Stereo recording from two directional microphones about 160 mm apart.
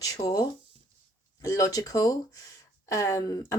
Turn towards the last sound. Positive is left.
turn(degrees=20)  # may be behind; listen again after turning